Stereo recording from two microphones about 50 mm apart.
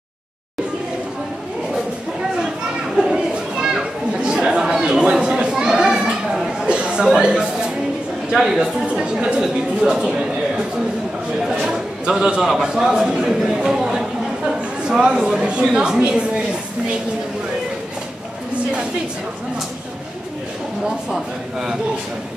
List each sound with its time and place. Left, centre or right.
3.0 s children playing: centre
6.6 s chatter: right
7.1 s a woman's voice: centre
11.6 s a man's voice: centre
13.6 s a sound: centre
15.4 s a woman's voice: centre